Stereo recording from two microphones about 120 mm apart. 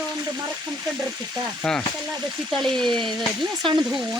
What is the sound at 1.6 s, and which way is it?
Speech, 10° left (ahead or behind).